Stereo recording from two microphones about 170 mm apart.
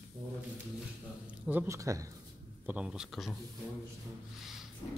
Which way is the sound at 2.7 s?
5° right (ahead or behind).